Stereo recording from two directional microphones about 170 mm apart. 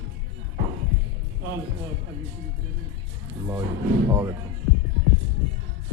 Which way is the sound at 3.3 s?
15° right (ahead or behind).